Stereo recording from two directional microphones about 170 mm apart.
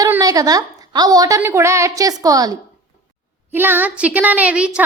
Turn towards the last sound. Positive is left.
turn(degrees=-5)  # may be behind; listen again after turning